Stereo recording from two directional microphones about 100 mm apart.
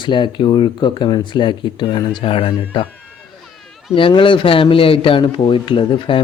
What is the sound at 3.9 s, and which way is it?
Speech, 60° left (ahead or behind).